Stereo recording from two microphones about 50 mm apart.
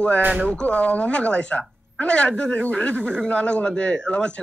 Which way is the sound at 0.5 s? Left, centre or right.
Left.